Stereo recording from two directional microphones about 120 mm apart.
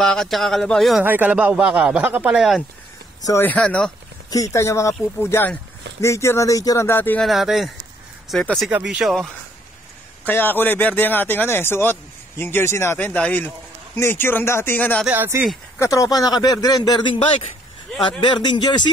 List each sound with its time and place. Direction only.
0.0 s speech: 5° left (ahead or behind)
1.0 s speech: 15° right (ahead or behind)
3.5 s speech: 5° left (ahead or behind)
4.3 s speech: 25° left (ahead or behind)
6.9 s a man's voice: 15° left (ahead or behind)
7.2 s speech: centre (ahead or behind)
10.2 s a man's voice: 15° left (ahead or behind)
15.0 s speech: 15° right (ahead or behind)
15.8 s speech: 30° left (ahead or behind)